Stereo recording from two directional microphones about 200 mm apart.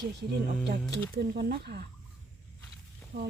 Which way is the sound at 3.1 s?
55° right (ahead or behind).